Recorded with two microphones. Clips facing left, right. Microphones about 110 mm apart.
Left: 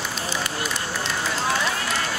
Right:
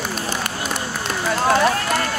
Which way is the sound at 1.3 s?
55° right (ahead or behind).